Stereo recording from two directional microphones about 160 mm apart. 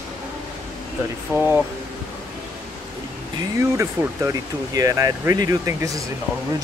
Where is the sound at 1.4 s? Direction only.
10° right (ahead or behind).